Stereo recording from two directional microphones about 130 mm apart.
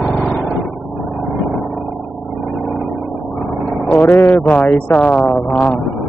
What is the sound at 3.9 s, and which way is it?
Speech, 15° left (ahead or behind).